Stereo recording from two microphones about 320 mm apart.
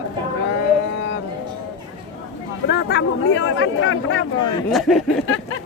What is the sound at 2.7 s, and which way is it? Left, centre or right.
Speech, left.